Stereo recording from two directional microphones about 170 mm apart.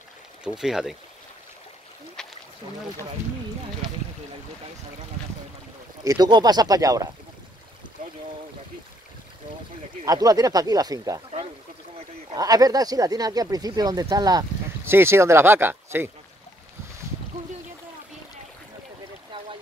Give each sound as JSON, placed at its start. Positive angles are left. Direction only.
{"t": 0.4, "sound": "speech", "side_deg": -5}
{"t": 2.2, "sound": "boat", "side_deg": 5}
{"t": 6.0, "sound": "speech", "side_deg": -25}
{"t": 10.0, "sound": "speech", "side_deg": -20}
{"t": 12.4, "sound": "speech", "side_deg": -20}
{"t": 19.3, "sound": "boat", "side_deg": -30}